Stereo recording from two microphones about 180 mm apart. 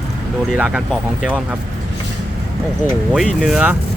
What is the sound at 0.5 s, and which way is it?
Speech, 5° right (ahead or behind).